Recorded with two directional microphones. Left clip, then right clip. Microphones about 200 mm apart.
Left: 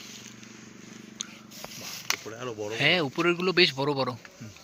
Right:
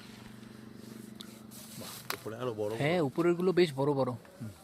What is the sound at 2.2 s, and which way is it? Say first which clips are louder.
Speech: even; 65° right (ahead or behind).